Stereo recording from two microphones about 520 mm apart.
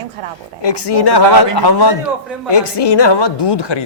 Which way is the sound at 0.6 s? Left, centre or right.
Left.